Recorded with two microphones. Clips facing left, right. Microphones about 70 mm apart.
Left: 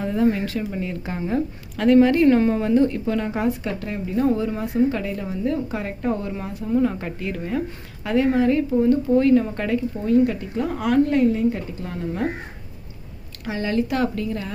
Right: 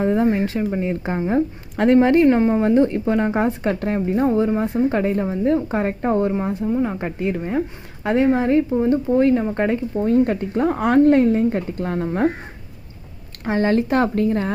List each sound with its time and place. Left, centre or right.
0.0 s speech: right
13.4 s speech: right